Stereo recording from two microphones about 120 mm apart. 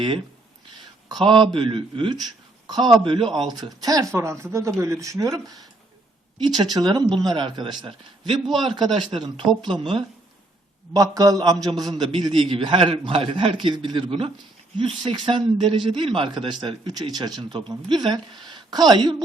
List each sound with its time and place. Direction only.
1.0 s a man's voice: 40° right (ahead or behind)
10.9 s a man's voice: 30° right (ahead or behind)